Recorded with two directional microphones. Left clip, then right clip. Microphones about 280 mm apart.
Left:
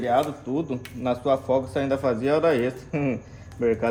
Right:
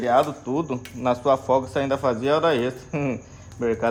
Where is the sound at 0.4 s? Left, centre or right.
Right.